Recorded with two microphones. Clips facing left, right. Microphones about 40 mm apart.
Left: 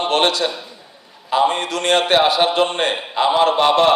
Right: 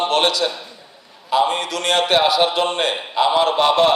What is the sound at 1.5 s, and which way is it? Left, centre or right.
A man's voice, left.